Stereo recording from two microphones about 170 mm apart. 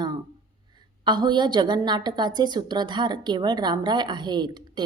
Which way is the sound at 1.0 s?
25° right (ahead or behind).